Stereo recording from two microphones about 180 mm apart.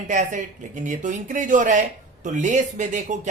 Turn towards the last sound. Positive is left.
turn(degrees=-40)  # may be behind; listen again after turning